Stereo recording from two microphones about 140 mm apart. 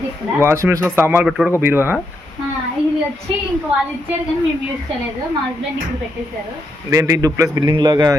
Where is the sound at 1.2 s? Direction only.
5° right (ahead or behind).